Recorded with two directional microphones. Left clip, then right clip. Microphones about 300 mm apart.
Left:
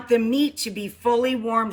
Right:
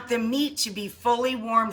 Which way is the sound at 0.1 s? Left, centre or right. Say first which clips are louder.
Left 6 dB; centre.